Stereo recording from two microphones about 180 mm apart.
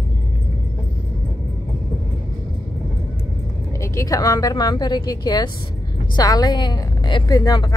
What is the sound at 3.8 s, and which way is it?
A woman's voice, 15° left (ahead or behind).